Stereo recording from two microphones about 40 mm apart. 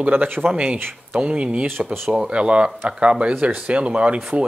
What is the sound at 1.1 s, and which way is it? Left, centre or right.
Speech, right.